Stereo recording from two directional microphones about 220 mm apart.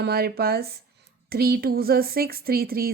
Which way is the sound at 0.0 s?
45° right (ahead or behind).